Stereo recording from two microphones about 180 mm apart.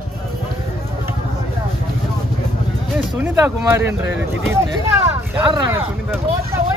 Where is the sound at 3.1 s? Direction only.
10° right (ahead or behind).